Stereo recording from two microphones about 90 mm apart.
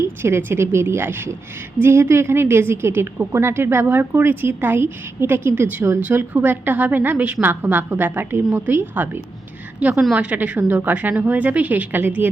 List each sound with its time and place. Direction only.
0.2 s a woman's voice: 25° right (ahead or behind)
9.8 s a woman's voice: 10° right (ahead or behind)